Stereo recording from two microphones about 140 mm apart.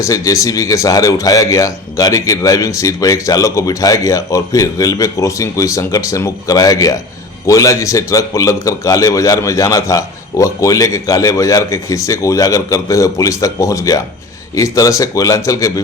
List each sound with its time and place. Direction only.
0.0 s speech: 25° left (ahead or behind)